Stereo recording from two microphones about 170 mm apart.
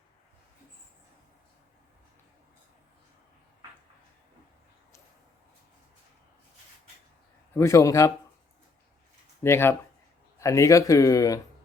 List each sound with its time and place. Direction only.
7.5 s speech: 15° left (ahead or behind)
9.4 s speech: 15° left (ahead or behind)